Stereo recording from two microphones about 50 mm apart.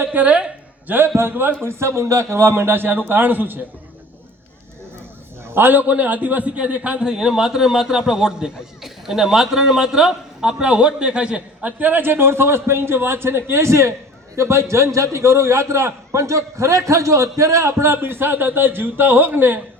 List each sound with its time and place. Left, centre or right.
0.1 s speech: right
0.9 s a man's voice: right
1.6 s a man's voice: right
5.5 s a man's voice: right
7.0 s a man's voice: centre
11.8 s a man's voice: right